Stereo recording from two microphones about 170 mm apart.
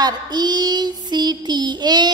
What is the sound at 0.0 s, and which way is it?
Child singing, 25° right (ahead or behind).